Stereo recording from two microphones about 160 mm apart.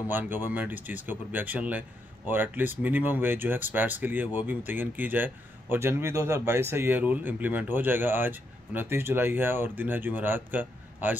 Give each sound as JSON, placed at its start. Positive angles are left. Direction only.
{"t": 0.1, "sound": "speech", "side_deg": -10}